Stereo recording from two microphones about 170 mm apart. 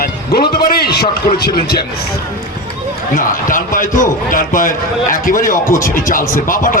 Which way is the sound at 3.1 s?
55° left (ahead or behind).